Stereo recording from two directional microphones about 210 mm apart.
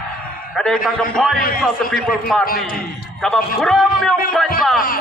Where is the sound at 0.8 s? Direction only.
Centre (ahead or behind).